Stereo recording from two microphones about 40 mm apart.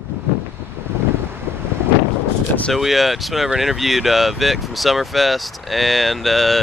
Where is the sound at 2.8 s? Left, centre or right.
Centre.